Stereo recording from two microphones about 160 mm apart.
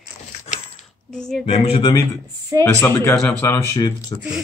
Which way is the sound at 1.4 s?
40° left (ahead or behind).